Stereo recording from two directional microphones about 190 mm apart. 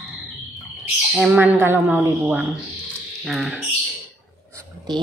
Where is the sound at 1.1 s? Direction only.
Centre (ahead or behind).